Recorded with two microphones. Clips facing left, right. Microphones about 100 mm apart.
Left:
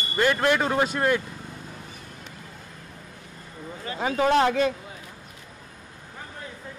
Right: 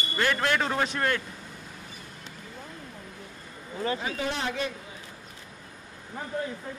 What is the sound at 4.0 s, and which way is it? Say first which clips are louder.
Speech: left 10 dB; 55° left (ahead or behind).